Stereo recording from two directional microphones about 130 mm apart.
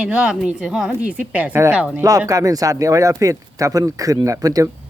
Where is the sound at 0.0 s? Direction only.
10° right (ahead or behind).